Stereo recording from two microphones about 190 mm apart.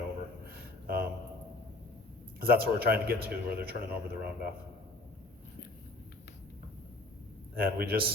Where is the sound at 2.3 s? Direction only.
50° right (ahead or behind).